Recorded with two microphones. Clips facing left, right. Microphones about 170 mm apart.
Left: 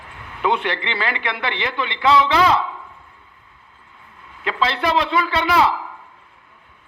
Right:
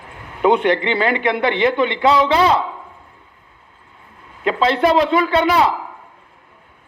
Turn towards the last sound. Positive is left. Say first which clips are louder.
# right 3 dB
turn(degrees=-45)  # may be behind; listen again after turning